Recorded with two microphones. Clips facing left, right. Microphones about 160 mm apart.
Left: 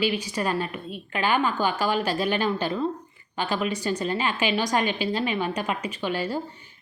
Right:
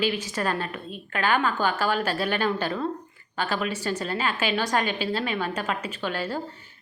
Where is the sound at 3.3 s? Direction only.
15° left (ahead or behind).